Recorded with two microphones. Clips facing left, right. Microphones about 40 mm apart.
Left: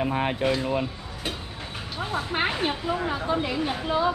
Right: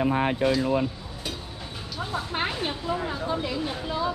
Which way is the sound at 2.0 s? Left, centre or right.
Centre.